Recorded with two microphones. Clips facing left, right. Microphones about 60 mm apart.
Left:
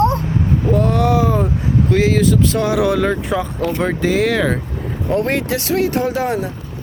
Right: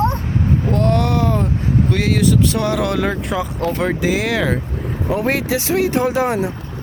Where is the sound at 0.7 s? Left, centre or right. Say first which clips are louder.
Left 3 dB; centre.